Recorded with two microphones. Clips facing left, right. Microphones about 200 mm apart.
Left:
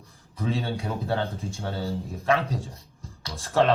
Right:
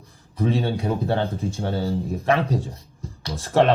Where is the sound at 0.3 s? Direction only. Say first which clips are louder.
Right 6 dB; 30° right (ahead or behind).